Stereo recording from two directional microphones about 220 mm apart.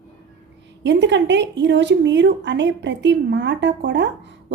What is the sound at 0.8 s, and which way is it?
A woman's voice, 55° right (ahead or behind).